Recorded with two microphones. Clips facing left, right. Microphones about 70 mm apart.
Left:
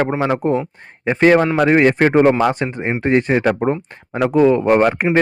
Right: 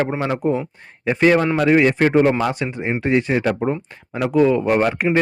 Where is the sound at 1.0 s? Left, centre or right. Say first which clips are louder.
Left 3 dB; left.